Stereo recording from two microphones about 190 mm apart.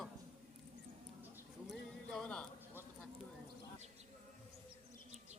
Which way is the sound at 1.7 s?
5° left (ahead or behind).